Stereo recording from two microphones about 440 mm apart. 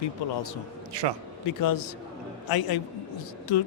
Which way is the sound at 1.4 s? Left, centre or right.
Left.